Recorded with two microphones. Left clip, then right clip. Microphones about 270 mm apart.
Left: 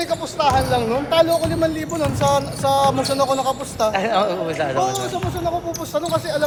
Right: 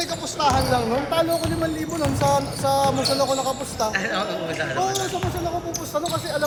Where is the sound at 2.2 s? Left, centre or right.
Left.